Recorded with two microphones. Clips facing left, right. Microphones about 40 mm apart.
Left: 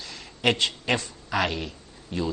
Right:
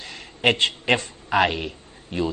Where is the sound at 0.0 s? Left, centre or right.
Right.